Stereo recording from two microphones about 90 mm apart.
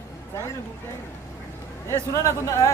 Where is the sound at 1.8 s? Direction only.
35° left (ahead or behind).